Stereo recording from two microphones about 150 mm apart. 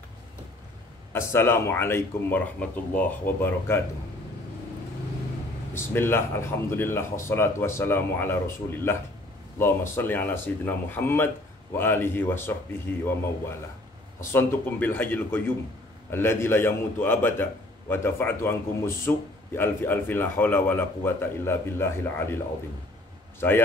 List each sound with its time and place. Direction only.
1.1 s a man's voice: 15° left (ahead or behind)
5.8 s a man's voice: 15° left (ahead or behind)
14.3 s a man's voice: 15° left (ahead or behind)
23.4 s a man's voice: 15° left (ahead or behind)